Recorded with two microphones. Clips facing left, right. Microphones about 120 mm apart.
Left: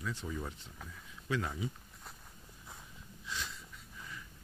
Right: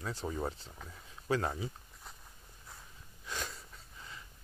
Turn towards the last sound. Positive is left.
turn(degrees=-45)  # may be behind; listen again after turning